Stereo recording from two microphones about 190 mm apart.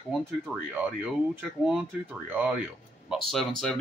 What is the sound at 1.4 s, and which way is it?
Speech, 5° right (ahead or behind).